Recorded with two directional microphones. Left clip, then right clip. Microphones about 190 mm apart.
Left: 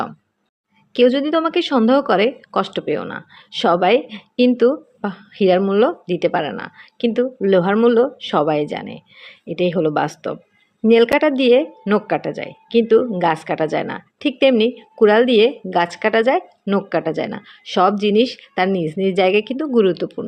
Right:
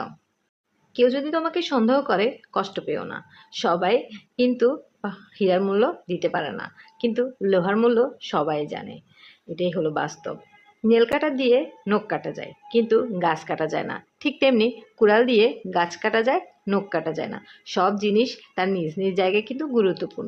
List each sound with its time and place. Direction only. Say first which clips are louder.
0.9 s speech: left 6 dB; 35° left (ahead or behind)